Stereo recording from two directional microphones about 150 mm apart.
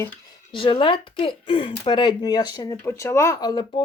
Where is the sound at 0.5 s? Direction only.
35° left (ahead or behind).